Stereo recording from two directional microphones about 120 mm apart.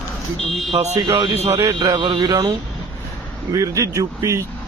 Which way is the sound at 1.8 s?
40° right (ahead or behind).